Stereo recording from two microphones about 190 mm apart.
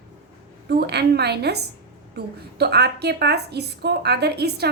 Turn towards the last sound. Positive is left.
turn(degrees=-60)  # may be behind; listen again after turning